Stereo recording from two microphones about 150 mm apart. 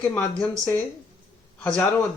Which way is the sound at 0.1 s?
10° left (ahead or behind).